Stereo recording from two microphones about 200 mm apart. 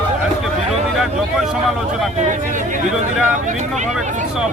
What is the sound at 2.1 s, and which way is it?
Speech, 40° right (ahead or behind).